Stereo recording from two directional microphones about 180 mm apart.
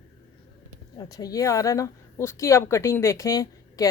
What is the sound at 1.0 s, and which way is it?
A woman's voice, 20° left (ahead or behind).